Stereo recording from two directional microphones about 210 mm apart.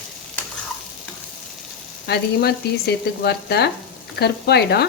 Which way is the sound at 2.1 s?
50° left (ahead or behind).